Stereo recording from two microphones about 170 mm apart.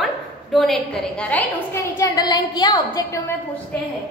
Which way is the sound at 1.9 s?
20° left (ahead or behind).